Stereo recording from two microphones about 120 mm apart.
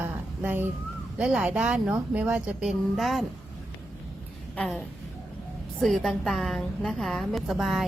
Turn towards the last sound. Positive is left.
turn(degrees=0)  # may be behind; listen again after turning